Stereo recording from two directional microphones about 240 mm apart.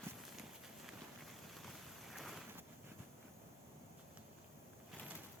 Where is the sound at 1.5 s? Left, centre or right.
Centre.